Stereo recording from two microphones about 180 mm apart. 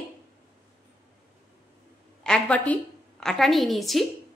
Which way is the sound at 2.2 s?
5° left (ahead or behind).